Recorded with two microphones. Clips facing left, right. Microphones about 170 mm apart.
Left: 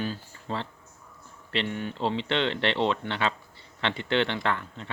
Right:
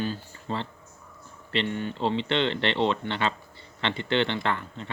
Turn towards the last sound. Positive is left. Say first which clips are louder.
# even
turn(degrees=0)  # may be behind; listen again after turning